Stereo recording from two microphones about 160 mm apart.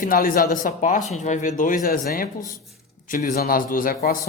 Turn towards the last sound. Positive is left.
turn(degrees=60)  # may be behind; listen again after turning